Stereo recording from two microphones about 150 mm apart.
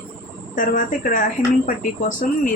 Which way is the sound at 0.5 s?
60° left (ahead or behind).